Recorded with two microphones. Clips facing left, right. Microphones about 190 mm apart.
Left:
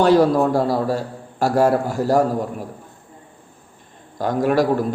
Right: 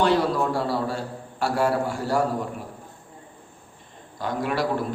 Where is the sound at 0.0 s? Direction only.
40° left (ahead or behind).